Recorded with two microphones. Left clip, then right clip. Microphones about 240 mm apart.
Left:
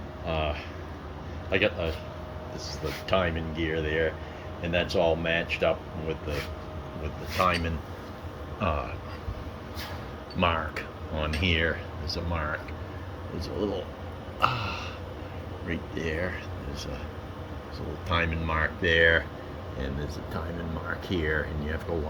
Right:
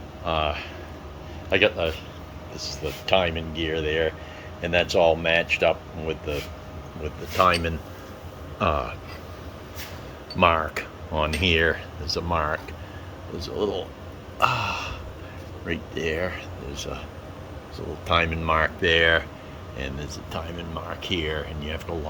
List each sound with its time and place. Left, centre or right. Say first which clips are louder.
0.3 s speech: right 5 dB; centre
7.3 s speech: right 6 dB; right
10.3 s speech: right 7 dB; centre
14.3 s a sound: right 5 dB; centre
15.6 s speech: right 5 dB; centre
21.2 s speech: even; centre